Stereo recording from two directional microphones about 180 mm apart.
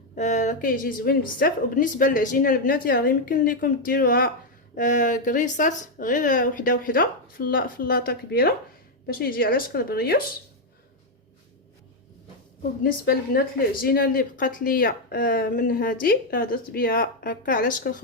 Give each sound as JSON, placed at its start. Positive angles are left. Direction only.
{"t": 0.2, "sound": "a woman's voice", "side_deg": 40}
{"t": 12.8, "sound": "speech", "side_deg": 60}